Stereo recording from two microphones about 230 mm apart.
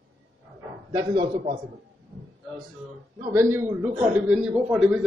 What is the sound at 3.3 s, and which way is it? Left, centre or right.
A man's voice, centre.